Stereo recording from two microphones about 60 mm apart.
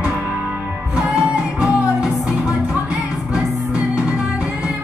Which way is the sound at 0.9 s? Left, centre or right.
Centre.